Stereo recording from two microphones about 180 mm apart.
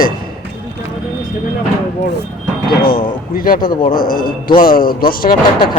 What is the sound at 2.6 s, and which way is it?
A man's voice, 55° left (ahead or behind).